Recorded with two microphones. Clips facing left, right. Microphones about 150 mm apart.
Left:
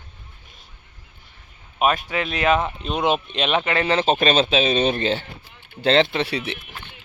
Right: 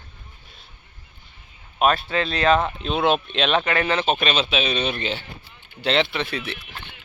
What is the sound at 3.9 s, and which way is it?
Speech, 45° left (ahead or behind).